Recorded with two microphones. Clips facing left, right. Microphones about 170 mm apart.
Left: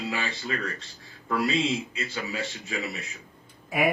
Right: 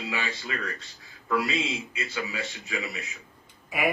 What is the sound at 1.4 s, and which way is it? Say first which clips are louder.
Speech: left 4 dB; 35° left (ahead or behind).